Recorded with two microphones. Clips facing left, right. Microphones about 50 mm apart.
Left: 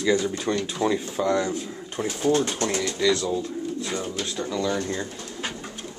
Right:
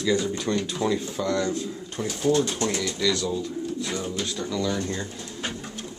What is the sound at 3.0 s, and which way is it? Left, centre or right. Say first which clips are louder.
Speech: left 4 dB; centre.